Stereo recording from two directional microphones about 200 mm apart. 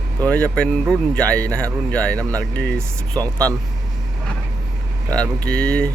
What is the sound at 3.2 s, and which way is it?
Speech, 15° right (ahead or behind).